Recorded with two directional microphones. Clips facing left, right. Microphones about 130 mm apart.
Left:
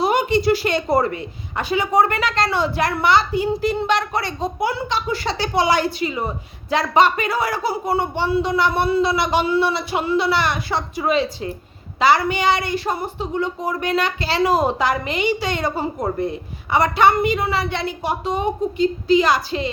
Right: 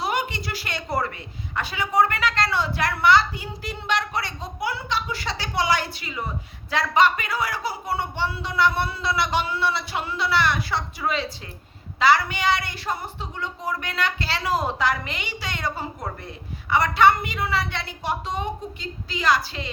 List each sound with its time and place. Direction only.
0.0 s a woman's voice: 25° left (ahead or behind)